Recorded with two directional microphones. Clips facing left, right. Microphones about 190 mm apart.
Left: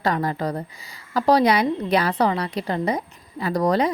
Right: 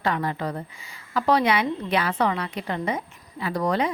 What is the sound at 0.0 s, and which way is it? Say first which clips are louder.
A woman's voice: left 3 dB; 40° left (ahead or behind).